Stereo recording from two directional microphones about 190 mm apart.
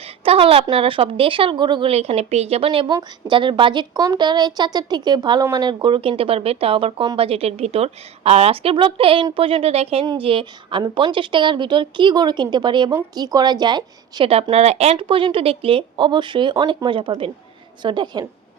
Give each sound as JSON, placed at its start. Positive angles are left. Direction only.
{"t": 0.3, "sound": "a woman's voice", "side_deg": -30}